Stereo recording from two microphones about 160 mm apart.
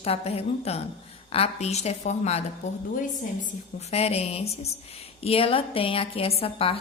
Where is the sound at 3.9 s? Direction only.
40° left (ahead or behind).